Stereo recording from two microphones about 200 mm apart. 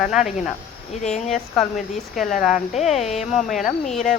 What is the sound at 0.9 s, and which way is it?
Speech, 35° left (ahead or behind).